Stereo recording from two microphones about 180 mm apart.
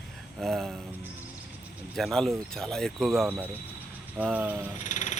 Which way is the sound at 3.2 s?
10° right (ahead or behind).